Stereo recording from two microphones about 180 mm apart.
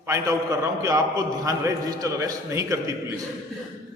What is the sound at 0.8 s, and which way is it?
A man's voice, 20° right (ahead or behind).